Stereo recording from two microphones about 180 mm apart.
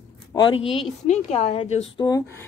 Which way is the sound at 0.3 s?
25° left (ahead or behind).